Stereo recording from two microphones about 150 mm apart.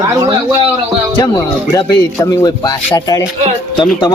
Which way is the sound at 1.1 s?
25° left (ahead or behind).